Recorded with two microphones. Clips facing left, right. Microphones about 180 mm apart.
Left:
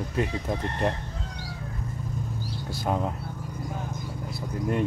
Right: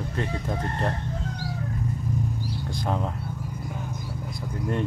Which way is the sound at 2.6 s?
5° left (ahead or behind).